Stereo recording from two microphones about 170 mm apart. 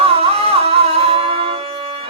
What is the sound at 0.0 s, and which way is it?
Music, 35° right (ahead or behind).